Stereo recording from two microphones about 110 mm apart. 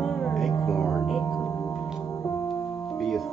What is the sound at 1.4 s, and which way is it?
Singing bowl, 25° left (ahead or behind).